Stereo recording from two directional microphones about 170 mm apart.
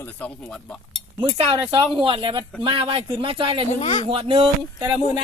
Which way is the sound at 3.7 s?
35° left (ahead or behind).